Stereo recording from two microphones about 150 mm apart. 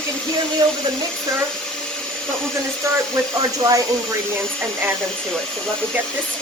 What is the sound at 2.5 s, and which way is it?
A woman's voice, 20° right (ahead or behind).